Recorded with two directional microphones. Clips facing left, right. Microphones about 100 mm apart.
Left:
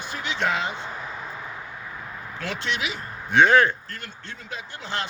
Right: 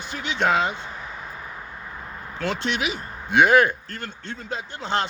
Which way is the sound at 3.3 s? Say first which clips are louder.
Right 1 dB; 15° right (ahead or behind).